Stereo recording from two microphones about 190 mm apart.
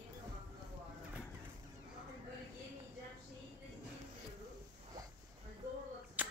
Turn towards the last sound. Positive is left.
turn(degrees=-10)  # may be behind; listen again after turning